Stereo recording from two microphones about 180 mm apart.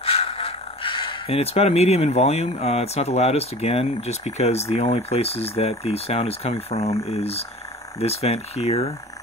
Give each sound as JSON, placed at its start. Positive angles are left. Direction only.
{"t": 0.0, "sound": "speech", "side_deg": 35}